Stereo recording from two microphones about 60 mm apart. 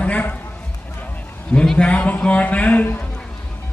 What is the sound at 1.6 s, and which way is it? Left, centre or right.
A man's voice, centre.